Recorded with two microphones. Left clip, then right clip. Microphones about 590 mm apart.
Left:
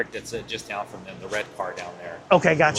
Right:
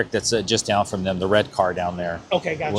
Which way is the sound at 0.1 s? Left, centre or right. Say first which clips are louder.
Right 11 dB; right.